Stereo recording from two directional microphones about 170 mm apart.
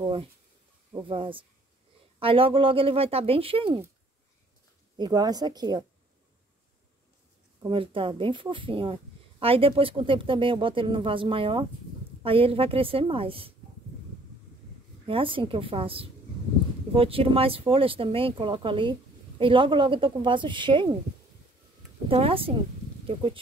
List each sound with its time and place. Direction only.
1.0 s speech: 30° right (ahead or behind)
4.9 s a woman's voice: 25° right (ahead or behind)
7.6 s speech: 30° right (ahead or behind)
15.0 s speech: 30° right (ahead or behind)
22.1 s speech: 35° right (ahead or behind)